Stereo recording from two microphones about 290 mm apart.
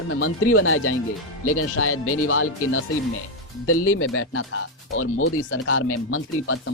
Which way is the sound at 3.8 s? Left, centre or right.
Left.